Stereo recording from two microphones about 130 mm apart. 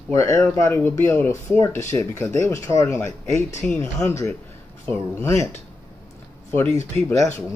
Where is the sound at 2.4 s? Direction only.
20° left (ahead or behind).